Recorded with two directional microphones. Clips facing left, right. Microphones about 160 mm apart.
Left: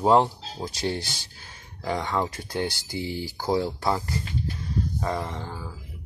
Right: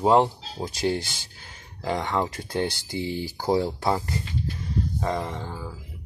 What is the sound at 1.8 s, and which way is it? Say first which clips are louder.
Speech: right 1 dB; 20° right (ahead or behind).